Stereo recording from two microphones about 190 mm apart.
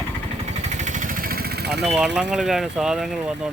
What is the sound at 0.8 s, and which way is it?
Vehicle, 40° right (ahead or behind).